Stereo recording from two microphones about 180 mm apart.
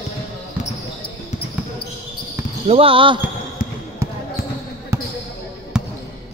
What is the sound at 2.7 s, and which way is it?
Speech, 30° right (ahead or behind).